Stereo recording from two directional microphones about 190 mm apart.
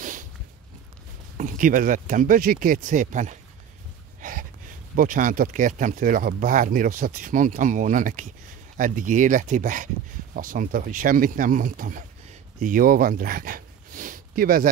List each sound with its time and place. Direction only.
0.0 s walk: 40° right (ahead or behind)
1.4 s speech: 45° right (ahead or behind)